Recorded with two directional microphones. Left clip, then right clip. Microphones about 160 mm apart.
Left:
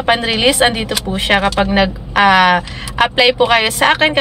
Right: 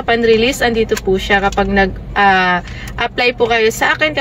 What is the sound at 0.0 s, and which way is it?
Speech, 20° left (ahead or behind).